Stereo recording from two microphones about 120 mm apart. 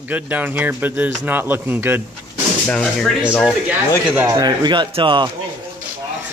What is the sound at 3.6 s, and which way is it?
Speech, 15° right (ahead or behind).